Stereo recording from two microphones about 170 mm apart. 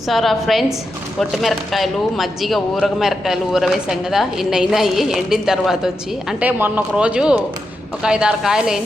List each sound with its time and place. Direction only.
0.1 s speech: centre (ahead or behind)